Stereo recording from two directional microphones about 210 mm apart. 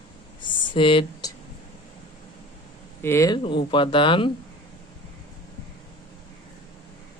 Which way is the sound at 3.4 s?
25° left (ahead or behind).